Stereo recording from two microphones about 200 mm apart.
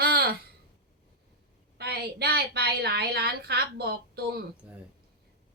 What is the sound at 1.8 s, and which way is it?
A woman's voice, 55° right (ahead or behind).